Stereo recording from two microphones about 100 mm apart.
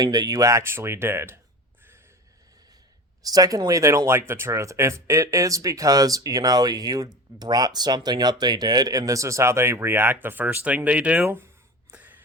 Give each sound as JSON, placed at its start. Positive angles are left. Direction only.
{"t": 0.0, "sound": "speech", "side_deg": -40}
{"t": 3.2, "sound": "speech", "side_deg": -35}
{"t": 11.9, "sound": "a sound", "side_deg": -15}